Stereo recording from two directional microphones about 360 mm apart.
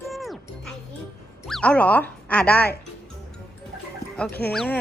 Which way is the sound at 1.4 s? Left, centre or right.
Centre.